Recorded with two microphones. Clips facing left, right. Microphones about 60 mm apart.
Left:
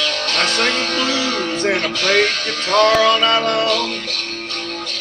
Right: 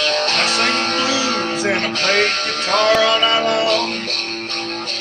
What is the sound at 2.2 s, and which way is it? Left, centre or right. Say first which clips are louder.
Music: even; right.